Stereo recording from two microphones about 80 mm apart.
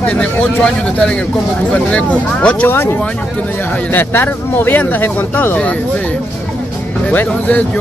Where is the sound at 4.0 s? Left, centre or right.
Left.